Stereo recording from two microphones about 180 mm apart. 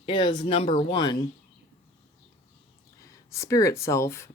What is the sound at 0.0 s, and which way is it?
Speech, 25° left (ahead or behind).